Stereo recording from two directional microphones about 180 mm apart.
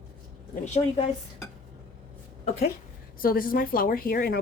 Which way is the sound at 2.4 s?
60° left (ahead or behind).